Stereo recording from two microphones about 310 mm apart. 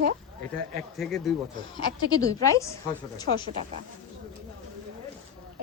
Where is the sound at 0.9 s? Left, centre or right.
Centre.